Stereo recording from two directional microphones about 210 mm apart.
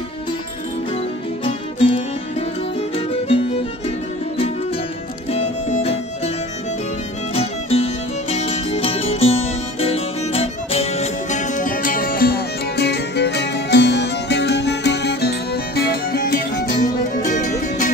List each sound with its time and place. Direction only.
1.4 s music: 25° left (ahead or behind)
3.1 s music: 25° left (ahead or behind)
5.3 s music: 30° left (ahead or behind)
7.3 s music: 30° left (ahead or behind)